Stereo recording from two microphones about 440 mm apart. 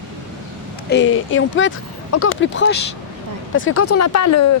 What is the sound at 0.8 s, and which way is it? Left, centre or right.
Speech, left.